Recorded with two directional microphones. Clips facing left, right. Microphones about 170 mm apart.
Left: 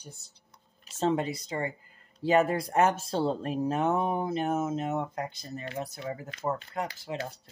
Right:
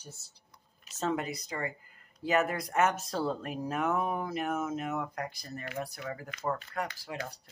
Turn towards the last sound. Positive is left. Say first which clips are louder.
# left 3 dB
turn(degrees=25)  # may be behind; listen again after turning